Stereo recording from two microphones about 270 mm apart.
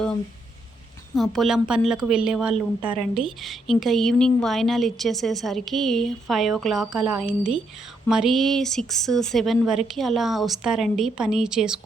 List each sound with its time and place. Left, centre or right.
1.1 s a woman's voice: centre